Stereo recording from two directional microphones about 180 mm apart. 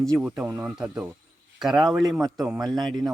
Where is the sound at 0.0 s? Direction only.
5° right (ahead or behind).